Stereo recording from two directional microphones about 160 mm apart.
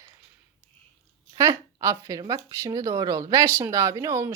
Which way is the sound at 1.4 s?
20° right (ahead or behind).